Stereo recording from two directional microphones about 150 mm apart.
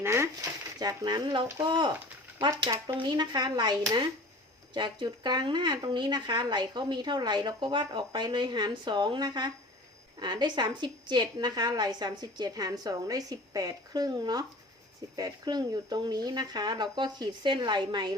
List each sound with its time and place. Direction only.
0.0 s a woman's voice: 20° right (ahead or behind)